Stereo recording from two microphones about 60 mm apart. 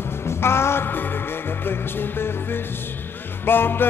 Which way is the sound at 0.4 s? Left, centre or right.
Left.